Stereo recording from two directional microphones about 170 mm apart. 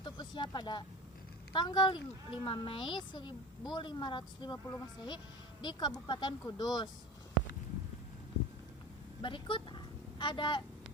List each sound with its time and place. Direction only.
0.0 s a sound: 30° left (ahead or behind)
1.5 s speech: 25° left (ahead or behind)
9.2 s a woman's voice: 30° left (ahead or behind)